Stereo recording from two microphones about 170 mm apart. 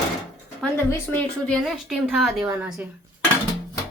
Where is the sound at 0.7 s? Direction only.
10° left (ahead or behind).